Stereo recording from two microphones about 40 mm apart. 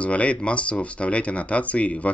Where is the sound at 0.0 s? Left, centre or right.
Left.